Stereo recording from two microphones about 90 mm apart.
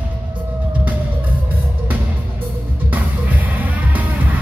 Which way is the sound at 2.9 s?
20° right (ahead or behind).